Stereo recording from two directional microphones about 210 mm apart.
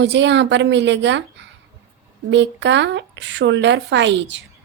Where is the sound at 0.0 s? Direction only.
55° right (ahead or behind).